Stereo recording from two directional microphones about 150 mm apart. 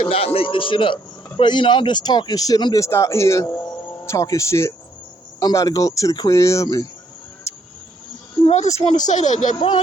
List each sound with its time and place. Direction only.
0.3 s speech: 35° left (ahead or behind)
8.4 s speech: 45° left (ahead or behind)
9.6 s speech: 30° left (ahead or behind)